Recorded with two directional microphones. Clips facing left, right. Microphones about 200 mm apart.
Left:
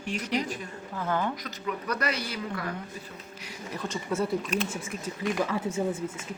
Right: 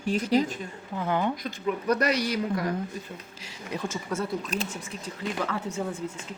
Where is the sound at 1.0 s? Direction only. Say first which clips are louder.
Right 3 dB; 15° right (ahead or behind).